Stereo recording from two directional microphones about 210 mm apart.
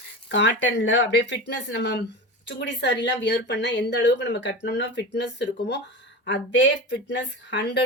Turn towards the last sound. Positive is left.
turn(degrees=55)  # may be behind; listen again after turning